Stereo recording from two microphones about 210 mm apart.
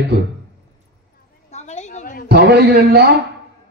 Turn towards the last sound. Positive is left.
turn(degrees=-50)  # may be behind; listen again after turning